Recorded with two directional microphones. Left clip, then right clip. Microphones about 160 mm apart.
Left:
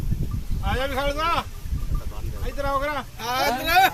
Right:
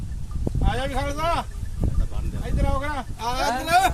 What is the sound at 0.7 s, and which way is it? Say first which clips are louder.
Speech: left 3 dB; 70° right (ahead or behind).